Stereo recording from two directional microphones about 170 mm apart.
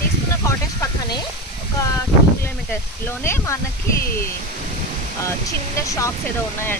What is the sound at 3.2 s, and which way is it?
Speech, 15° left (ahead or behind).